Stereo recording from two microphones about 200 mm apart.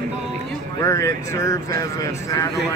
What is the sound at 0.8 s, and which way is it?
Speech, 15° left (ahead or behind).